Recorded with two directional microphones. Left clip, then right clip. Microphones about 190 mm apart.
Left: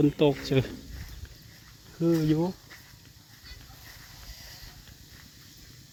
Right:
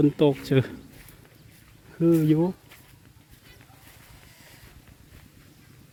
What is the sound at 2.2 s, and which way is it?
Speech, 25° right (ahead or behind).